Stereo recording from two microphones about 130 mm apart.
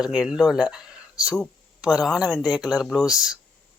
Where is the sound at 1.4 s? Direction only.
Centre (ahead or behind).